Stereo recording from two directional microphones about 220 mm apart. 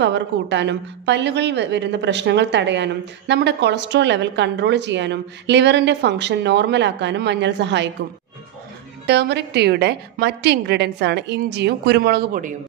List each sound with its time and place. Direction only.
0.0 s a woman's voice: 55° right (ahead or behind)
9.0 s a woman's voice: 50° right (ahead or behind)